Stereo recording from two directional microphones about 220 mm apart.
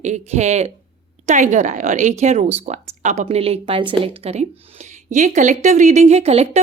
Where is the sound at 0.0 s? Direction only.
30° right (ahead or behind).